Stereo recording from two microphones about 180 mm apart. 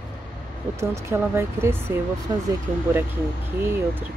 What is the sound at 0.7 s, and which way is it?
Speech, 15° right (ahead or behind).